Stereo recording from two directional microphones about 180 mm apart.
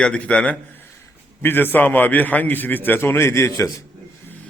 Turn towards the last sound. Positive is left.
turn(degrees=15)  # may be behind; listen again after turning